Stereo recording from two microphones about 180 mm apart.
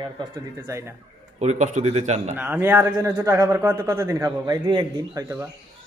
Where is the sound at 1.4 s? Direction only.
40° right (ahead or behind).